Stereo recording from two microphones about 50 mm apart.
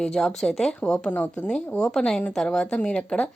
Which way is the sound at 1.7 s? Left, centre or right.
Centre.